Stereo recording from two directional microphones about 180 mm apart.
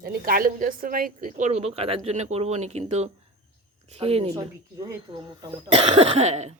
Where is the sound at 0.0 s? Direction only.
55° right (ahead or behind); by 4.3 s 35° right (ahead or behind).